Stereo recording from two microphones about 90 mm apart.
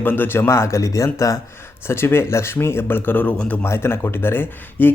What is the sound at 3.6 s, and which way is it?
Speech, 30° left (ahead or behind).